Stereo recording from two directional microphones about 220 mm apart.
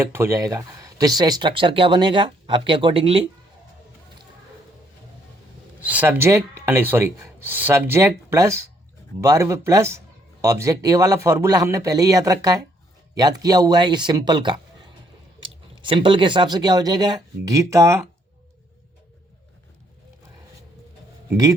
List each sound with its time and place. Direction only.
0.0 s speech: 10° right (ahead or behind)
5.8 s speech: 5° right (ahead or behind)
15.7 s speech: 20° right (ahead or behind)
21.2 s speech: 15° right (ahead or behind)